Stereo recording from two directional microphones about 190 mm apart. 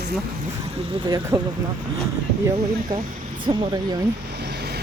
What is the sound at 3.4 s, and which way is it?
Speech, 25° right (ahead or behind).